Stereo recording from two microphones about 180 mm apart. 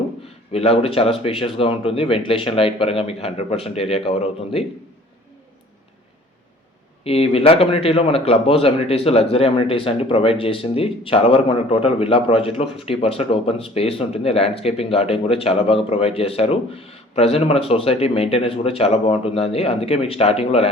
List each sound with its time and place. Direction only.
0.5 s a man's voice: 35° left (ahead or behind)
7.0 s a man's voice: 35° left (ahead or behind)